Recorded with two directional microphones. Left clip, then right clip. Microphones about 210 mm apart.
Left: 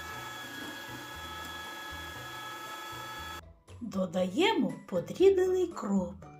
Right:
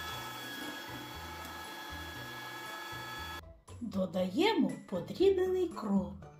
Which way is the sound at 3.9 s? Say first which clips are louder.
Left 3 dB; 20° left (ahead or behind).